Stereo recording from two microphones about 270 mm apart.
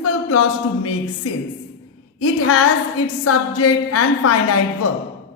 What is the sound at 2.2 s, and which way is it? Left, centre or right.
A woman's voice, left.